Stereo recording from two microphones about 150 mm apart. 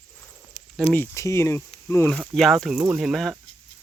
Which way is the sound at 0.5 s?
5° right (ahead or behind).